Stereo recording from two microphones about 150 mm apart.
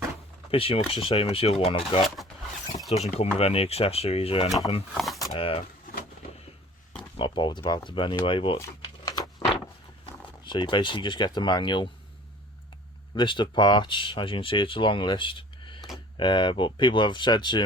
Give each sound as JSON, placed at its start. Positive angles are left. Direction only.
{"t": 0.5, "sound": "speech", "side_deg": 40}
{"t": 3.2, "sound": "speech", "side_deg": 40}
{"t": 4.9, "sound": "a sound", "side_deg": 0}
{"t": 5.3, "sound": "speech", "side_deg": 40}
{"t": 5.8, "sound": "vehicle", "side_deg": 75}
{"t": 7.2, "sound": "speech", "side_deg": 35}
{"t": 9.0, "sound": "a sound", "side_deg": 25}
{"t": 10.4, "sound": "speech", "side_deg": 30}
{"t": 13.1, "sound": "speech", "side_deg": 30}